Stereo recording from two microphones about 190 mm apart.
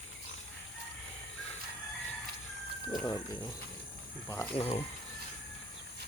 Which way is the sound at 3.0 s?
20° left (ahead or behind).